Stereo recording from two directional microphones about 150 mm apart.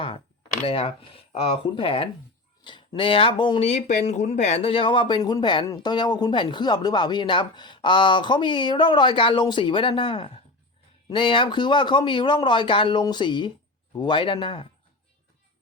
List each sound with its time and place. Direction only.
0.7 s speech: 40° left (ahead or behind)
3.6 s speech: 50° left (ahead or behind)